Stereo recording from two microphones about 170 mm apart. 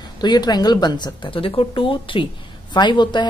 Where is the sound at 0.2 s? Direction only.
25° left (ahead or behind).